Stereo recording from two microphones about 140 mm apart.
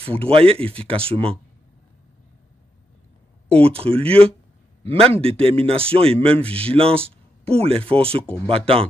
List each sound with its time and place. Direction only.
0.2 s speech: 40° right (ahead or behind)
3.5 s a man's voice: 45° right (ahead or behind)
8.2 s speech: 10° left (ahead or behind)
8.5 s a man's voice: 40° right (ahead or behind)